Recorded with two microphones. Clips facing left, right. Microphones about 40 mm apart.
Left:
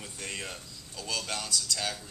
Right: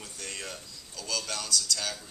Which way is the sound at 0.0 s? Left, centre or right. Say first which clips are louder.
Left 1 dB; left.